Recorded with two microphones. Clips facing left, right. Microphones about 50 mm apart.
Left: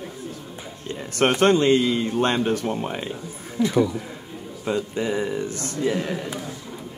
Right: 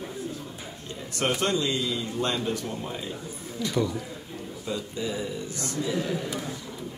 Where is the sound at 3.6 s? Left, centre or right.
Left.